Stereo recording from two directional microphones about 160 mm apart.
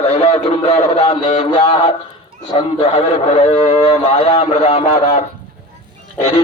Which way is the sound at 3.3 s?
40° left (ahead or behind).